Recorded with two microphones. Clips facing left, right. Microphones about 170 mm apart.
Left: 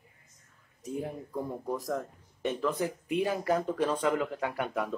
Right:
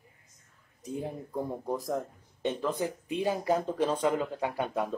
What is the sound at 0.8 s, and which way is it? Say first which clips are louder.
Speech: even; 25° right (ahead or behind).